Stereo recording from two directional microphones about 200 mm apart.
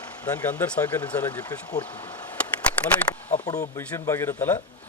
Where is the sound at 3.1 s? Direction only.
20° left (ahead or behind).